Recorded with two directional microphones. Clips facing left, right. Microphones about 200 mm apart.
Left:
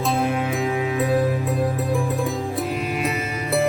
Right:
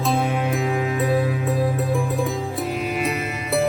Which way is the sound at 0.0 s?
Centre (ahead or behind).